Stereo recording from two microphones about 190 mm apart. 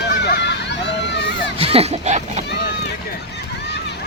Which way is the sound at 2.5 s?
60° left (ahead or behind).